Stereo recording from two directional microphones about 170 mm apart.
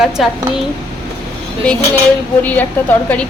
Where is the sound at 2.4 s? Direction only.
10° left (ahead or behind).